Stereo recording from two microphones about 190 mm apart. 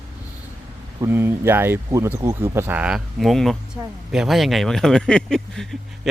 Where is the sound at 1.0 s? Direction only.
10° right (ahead or behind).